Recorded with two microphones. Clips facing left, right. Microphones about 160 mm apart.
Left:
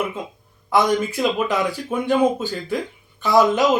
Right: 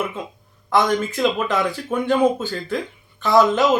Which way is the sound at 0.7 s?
10° left (ahead or behind).